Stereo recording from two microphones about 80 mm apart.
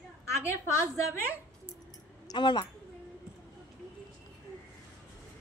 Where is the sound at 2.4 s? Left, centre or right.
Left.